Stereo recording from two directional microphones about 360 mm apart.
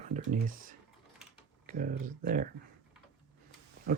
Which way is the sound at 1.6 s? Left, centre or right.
Right.